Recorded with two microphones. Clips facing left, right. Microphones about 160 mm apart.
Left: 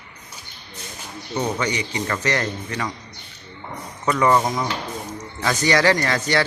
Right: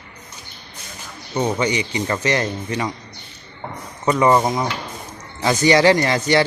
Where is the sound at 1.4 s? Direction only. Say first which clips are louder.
Right 4 dB; 20° right (ahead or behind).